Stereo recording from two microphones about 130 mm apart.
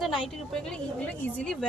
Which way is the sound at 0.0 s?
5° left (ahead or behind).